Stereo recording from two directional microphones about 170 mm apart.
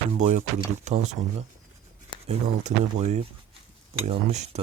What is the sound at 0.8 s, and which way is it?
Speech, 40° right (ahead or behind).